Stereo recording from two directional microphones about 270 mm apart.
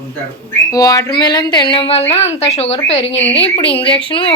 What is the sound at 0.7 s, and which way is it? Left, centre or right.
A woman's voice, centre.